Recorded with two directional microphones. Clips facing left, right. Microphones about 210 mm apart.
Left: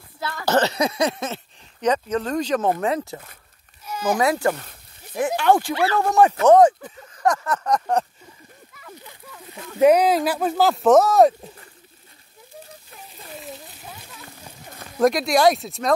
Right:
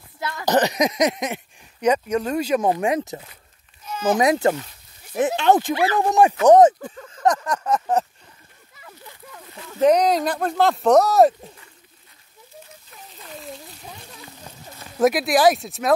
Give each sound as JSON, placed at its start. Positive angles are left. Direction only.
{"t": 0.2, "sound": "speech", "side_deg": -15}
{"t": 3.8, "sound": "a sound", "side_deg": 10}
{"t": 4.2, "sound": "speech", "side_deg": -20}
{"t": 9.8, "sound": "speech", "side_deg": 5}
{"t": 15.0, "sound": "speech", "side_deg": -5}